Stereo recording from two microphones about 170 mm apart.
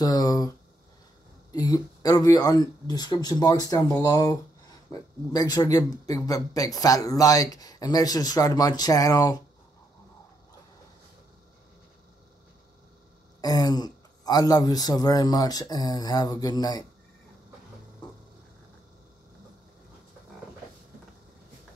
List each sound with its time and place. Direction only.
0.0 s speech: 20° left (ahead or behind)
13.4 s speech: 20° left (ahead or behind)